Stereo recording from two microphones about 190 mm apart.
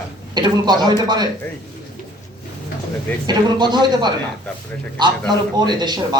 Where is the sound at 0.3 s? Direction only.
20° right (ahead or behind).